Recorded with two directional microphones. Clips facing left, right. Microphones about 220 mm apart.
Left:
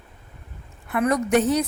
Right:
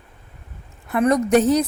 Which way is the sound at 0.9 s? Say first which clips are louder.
Right 4 dB; 30° right (ahead or behind).